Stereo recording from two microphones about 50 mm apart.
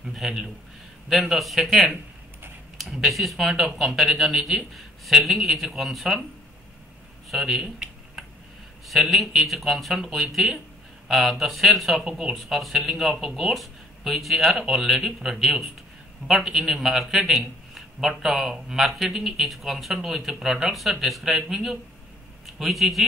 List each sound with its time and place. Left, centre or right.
0.1 s a man's voice: centre
7.2 s a sound: centre
9.1 s a man's voice: centre
12.0 s a man's voice: centre